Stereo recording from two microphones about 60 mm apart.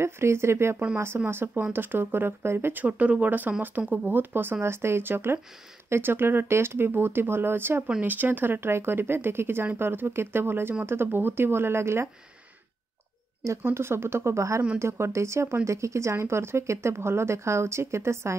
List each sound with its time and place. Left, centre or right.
0.0 s speech: right
2.8 s speech: right
4.1 s speech: right
13.6 s speech: right